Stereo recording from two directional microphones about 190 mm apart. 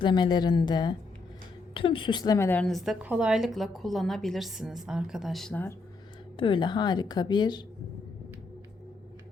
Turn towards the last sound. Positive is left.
turn(degrees=20)  # may be behind; listen again after turning